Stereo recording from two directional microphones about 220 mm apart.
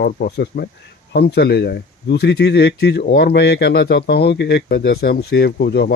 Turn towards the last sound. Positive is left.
turn(degrees=45)  # may be behind; listen again after turning